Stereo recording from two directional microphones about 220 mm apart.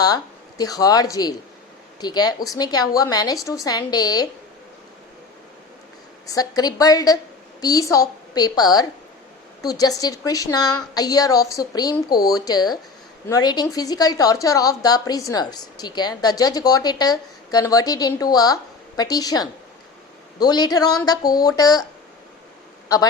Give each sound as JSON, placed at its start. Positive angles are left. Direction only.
{"t": 0.0, "sound": "a woman's voice", "side_deg": 15}
{"t": 6.2, "sound": "a woman's voice", "side_deg": 15}